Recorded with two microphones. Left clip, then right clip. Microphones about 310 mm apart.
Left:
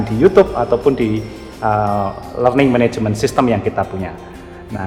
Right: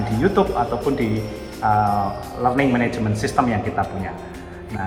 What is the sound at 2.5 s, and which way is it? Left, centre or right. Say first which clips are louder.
A man's voice: left 6 dB; left.